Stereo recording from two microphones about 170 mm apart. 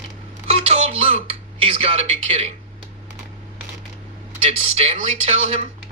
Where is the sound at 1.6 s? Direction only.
35° right (ahead or behind).